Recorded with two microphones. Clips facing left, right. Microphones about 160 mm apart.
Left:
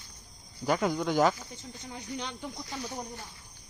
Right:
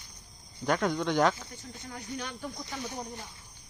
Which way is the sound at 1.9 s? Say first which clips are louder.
Left 1 dB; 20° left (ahead or behind).